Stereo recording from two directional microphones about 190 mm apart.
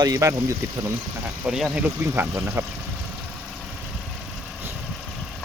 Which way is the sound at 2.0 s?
15° right (ahead or behind).